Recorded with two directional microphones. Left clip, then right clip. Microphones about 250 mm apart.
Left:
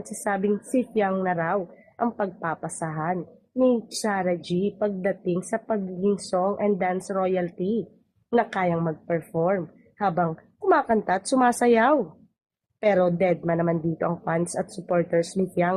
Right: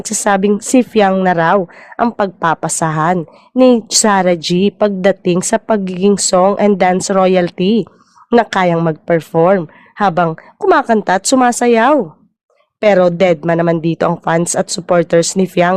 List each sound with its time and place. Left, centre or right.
0.3 s a woman's voice: right